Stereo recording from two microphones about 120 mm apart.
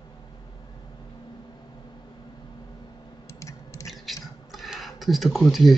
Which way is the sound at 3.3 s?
25° left (ahead or behind).